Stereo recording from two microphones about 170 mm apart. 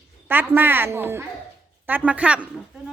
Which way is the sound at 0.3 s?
10° right (ahead or behind).